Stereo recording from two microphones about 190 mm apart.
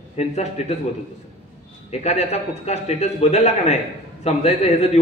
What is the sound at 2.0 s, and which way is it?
A man's voice, 35° left (ahead or behind).